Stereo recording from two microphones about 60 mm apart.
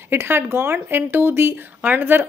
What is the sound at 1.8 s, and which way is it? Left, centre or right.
Speech, right.